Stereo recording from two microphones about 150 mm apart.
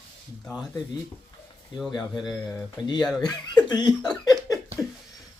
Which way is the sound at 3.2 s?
25° left (ahead or behind).